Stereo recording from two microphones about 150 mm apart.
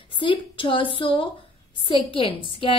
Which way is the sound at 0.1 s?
35° left (ahead or behind).